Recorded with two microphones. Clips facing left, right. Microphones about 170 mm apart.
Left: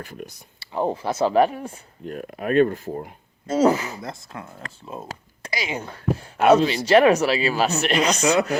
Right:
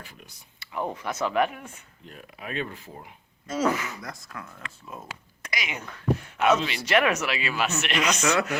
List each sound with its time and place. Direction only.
0.0 s speech: 45° left (ahead or behind)
0.6 s speech: 30° left (ahead or behind)
2.0 s speech: 50° left (ahead or behind)
3.4 s speech: 30° left (ahead or behind)